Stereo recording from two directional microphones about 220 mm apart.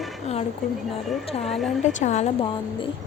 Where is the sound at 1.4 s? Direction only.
Centre (ahead or behind).